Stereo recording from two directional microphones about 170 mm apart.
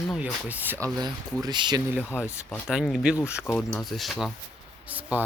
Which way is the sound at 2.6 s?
5° right (ahead or behind).